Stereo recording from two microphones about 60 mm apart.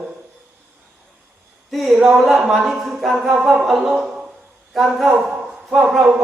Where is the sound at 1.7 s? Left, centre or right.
Centre.